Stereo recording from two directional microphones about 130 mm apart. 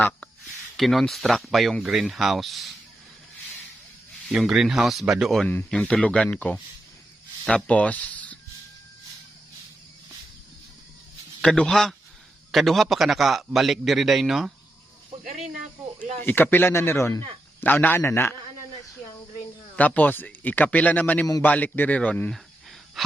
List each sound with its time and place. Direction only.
0.8 s a man's voice: centre (ahead or behind)
4.3 s a man's voice: 5° right (ahead or behind); by 8.4 s 10° left (ahead or behind)
11.4 s a man's voice: 5° left (ahead or behind)
16.2 s speech: 15° left (ahead or behind)
19.7 s speech: 10° left (ahead or behind)
23.0 s wheeze: centre (ahead or behind)